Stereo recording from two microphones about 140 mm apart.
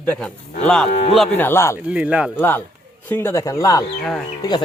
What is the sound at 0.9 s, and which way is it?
Cattle, 50° left (ahead or behind).